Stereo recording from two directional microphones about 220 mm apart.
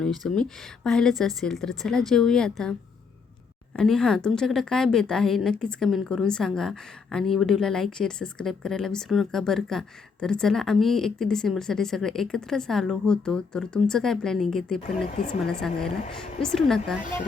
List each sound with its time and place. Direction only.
0.0 s speech: 5° left (ahead or behind)
3.8 s speech: 5° left (ahead or behind)
15.1 s speech: 35° left (ahead or behind)
16.1 s speech: centre (ahead or behind)